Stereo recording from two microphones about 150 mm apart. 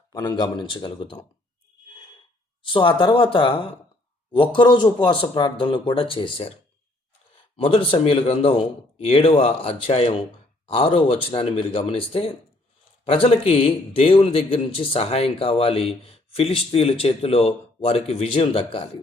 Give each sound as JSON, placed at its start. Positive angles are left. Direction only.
{"t": 0.1, "sound": "a man's voice", "side_deg": 30}
{"t": 2.6, "sound": "a man's voice", "side_deg": 35}
{"t": 7.5, "sound": "a man's voice", "side_deg": 35}